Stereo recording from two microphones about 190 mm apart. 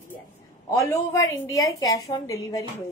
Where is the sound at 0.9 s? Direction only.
15° left (ahead or behind).